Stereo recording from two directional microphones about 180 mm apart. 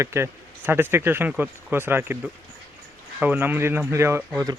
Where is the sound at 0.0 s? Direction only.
15° right (ahead or behind).